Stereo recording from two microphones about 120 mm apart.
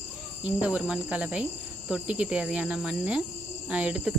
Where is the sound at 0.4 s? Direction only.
10° right (ahead or behind).